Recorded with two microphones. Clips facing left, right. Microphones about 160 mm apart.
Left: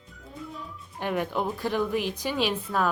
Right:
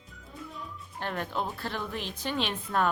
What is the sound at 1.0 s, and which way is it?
A woman's voice, 10° left (ahead or behind).